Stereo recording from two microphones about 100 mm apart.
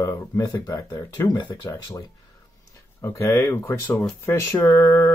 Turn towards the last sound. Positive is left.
turn(degrees=30)  # may be behind; listen again after turning